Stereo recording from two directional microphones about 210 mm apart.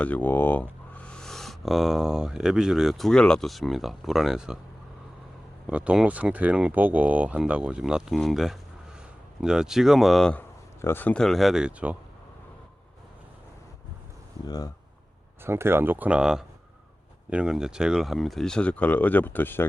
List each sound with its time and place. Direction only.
0.0 s speech: 10° left (ahead or behind)
5.6 s speech: 5° right (ahead or behind)
14.4 s speech: 15° left (ahead or behind)
15.4 s speech: 10° right (ahead or behind); by 19.6 s 10° left (ahead or behind)